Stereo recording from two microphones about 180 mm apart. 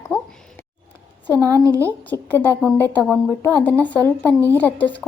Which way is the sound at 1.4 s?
20° right (ahead or behind).